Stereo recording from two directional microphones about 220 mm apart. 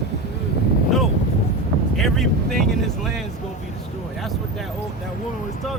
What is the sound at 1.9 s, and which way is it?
Speech, centre (ahead or behind).